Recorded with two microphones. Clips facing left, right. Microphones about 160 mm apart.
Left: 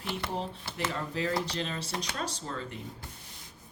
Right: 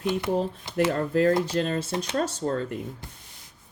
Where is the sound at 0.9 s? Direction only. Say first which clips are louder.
Right 9 dB; 50° right (ahead or behind).